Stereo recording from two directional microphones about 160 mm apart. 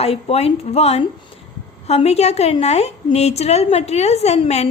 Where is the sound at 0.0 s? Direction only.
40° left (ahead or behind).